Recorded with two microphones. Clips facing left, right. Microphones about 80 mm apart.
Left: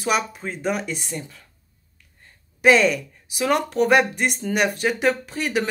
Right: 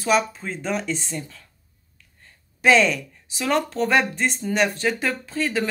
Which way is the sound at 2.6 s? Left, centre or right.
Centre.